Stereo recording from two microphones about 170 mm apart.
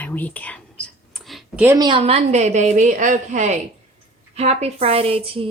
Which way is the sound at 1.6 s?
15° right (ahead or behind).